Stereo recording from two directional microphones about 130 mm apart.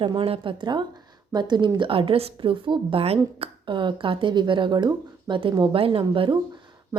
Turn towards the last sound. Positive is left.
turn(degrees=-35)  # may be behind; listen again after turning